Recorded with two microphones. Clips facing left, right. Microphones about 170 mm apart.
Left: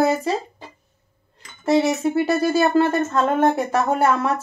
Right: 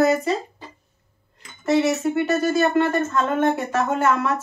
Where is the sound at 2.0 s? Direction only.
35° left (ahead or behind).